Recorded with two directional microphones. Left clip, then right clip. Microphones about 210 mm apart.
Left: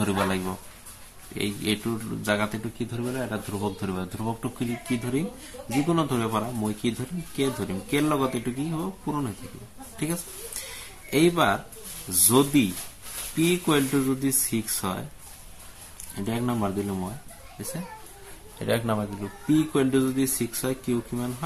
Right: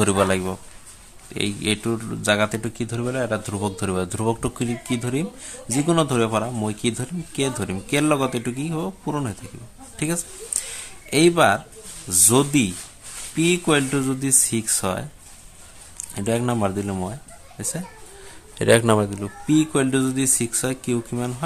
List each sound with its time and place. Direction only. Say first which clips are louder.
0.0 s speech: right 7 dB; 45° right (ahead or behind)
9.9 s speech: right 5 dB; 45° right (ahead or behind)
16.3 s speech: right 6 dB; 45° right (ahead or behind)
18.6 s speech: right 10 dB; 50° right (ahead or behind)